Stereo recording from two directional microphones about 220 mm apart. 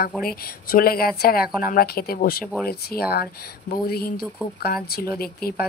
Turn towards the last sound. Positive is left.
turn(degrees=45)  # may be behind; listen again after turning